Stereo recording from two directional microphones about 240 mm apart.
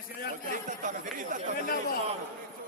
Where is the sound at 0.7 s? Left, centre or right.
Right.